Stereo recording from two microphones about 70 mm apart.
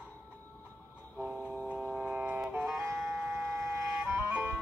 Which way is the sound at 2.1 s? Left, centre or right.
Centre.